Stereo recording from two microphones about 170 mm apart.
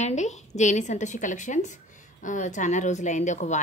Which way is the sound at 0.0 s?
40° left (ahead or behind).